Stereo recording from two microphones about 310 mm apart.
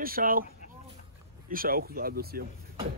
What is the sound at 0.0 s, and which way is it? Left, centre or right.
Speech, right.